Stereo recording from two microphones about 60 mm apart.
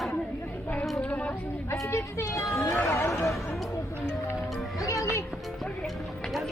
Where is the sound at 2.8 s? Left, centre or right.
Left.